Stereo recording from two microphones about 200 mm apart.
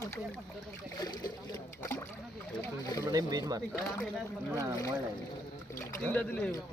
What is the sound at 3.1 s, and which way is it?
Speech, 20° right (ahead or behind).